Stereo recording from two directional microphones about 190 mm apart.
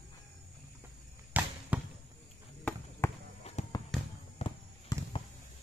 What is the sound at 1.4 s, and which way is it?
Basketball bounce, 10° right (ahead or behind).